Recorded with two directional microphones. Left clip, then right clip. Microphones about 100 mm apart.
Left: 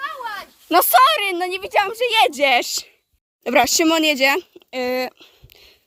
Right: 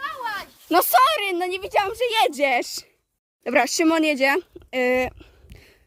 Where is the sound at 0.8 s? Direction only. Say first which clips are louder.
Left 4 dB; 15° right (ahead or behind).